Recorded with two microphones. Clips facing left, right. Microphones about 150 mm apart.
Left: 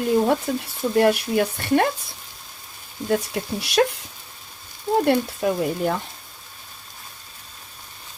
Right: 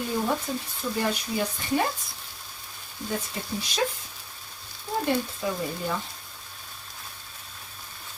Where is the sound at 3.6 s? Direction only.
70° left (ahead or behind).